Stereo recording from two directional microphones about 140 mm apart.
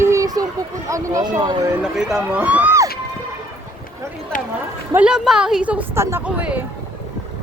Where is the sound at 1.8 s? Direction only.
5° right (ahead or behind).